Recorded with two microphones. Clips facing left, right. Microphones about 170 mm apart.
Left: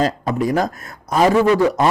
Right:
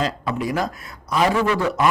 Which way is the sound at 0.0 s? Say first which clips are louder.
Left 5 dB; 45° left (ahead or behind).